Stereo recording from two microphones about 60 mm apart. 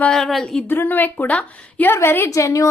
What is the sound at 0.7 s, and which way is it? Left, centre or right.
A woman's voice, left.